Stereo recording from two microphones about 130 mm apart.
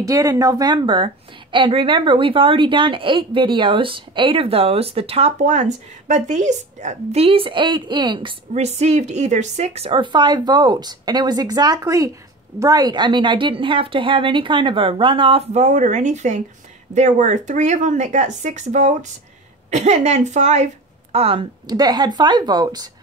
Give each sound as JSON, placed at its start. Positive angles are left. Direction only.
{"t": 0.0, "sound": "a woman's voice", "side_deg": -25}
{"t": 8.5, "sound": "speech", "side_deg": -55}
{"t": 9.8, "sound": "a woman's voice", "side_deg": -40}
{"t": 15.5, "sound": "a woman's voice", "side_deg": -65}
{"t": 21.6, "sound": "a woman's voice", "side_deg": -30}